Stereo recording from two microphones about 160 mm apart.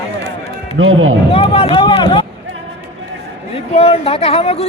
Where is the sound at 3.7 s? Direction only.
40° left (ahead or behind).